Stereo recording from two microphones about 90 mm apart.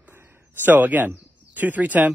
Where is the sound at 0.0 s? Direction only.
25° right (ahead or behind).